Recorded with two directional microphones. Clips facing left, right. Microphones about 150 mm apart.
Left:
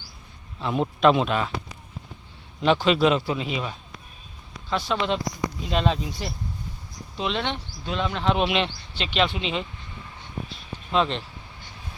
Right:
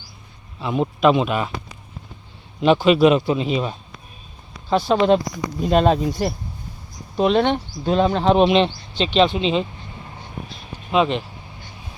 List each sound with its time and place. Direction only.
0.6 s a man's voice: 5° right (ahead or behind)
2.6 s speech: 15° right (ahead or behind)
4.9 s speech: 45° right (ahead or behind); by 9.6 s 25° right (ahead or behind)
10.9 s speech: 10° right (ahead or behind)